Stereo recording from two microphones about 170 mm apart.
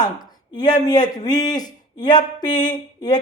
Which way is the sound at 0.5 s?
25° left (ahead or behind).